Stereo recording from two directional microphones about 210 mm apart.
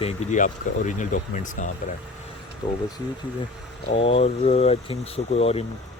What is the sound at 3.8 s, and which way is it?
Speech, 25° left (ahead or behind).